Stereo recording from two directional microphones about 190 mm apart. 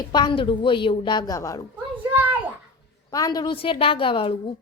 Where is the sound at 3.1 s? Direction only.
20° left (ahead or behind).